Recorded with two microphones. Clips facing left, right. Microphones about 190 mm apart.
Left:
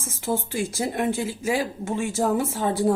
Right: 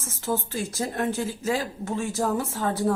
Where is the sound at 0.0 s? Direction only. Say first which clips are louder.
Left 2 dB; 10° left (ahead or behind).